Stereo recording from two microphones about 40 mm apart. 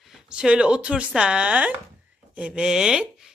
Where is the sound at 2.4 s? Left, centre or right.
Centre.